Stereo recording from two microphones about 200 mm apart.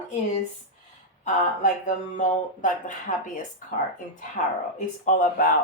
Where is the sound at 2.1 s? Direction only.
40° left (ahead or behind).